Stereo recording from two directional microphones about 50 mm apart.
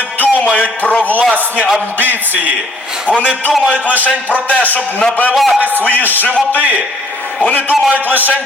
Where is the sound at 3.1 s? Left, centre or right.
Left.